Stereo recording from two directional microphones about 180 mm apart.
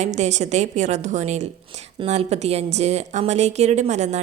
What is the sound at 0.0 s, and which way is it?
Speech, 40° right (ahead or behind).